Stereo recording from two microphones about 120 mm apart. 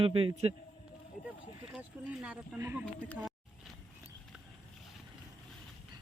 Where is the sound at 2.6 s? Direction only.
20° right (ahead or behind).